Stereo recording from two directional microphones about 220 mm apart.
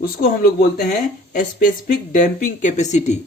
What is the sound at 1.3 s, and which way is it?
A woman's voice, 35° left (ahead or behind).